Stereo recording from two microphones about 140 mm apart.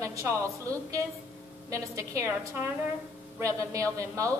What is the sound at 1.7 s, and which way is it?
Speech, 25° right (ahead or behind).